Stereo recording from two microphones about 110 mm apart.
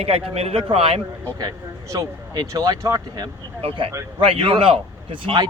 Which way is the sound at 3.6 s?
55° right (ahead or behind).